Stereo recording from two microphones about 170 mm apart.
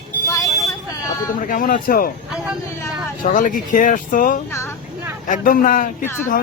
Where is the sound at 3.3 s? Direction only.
50° left (ahead or behind).